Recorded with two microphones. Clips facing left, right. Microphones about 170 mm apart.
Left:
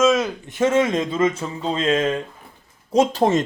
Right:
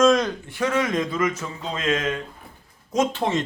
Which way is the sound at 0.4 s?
20° left (ahead or behind).